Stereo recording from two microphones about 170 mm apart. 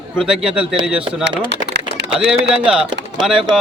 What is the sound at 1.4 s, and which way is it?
Typing, 85° right.